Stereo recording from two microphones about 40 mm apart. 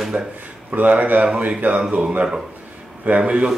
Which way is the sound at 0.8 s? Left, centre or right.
Right.